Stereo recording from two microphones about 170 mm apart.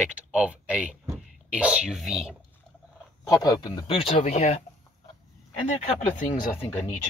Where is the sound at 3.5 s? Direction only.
25° left (ahead or behind).